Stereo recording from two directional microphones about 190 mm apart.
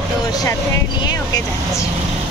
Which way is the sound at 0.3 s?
20° left (ahead or behind).